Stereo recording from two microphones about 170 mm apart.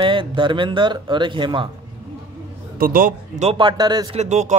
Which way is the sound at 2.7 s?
60° right (ahead or behind).